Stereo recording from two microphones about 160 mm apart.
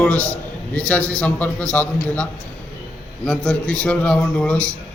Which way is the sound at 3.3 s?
5° left (ahead or behind).